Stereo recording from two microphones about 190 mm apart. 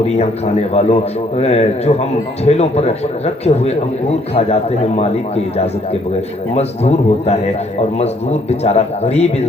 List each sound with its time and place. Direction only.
0.2 s a man's voice: 35° left (ahead or behind)